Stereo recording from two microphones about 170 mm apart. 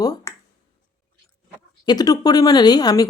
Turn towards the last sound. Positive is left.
turn(degrees=20)  # may be behind; listen again after turning